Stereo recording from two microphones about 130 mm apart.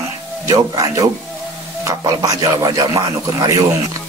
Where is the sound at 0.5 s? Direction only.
25° right (ahead or behind).